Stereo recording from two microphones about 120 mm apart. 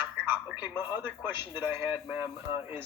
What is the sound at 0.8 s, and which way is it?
A man's voice, 15° right (ahead or behind).